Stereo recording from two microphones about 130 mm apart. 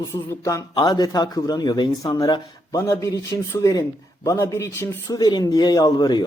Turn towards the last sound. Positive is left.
turn(degrees=35)  # may be behind; listen again after turning